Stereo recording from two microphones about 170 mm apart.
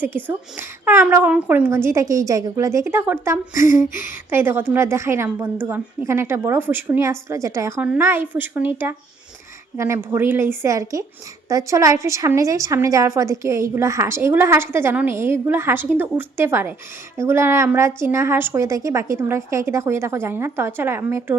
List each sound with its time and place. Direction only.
0.0 s a woman's voice: 10° right (ahead or behind)
3.6 s a sound: 50° left (ahead or behind)
3.8 s a woman's voice: 15° right (ahead or behind)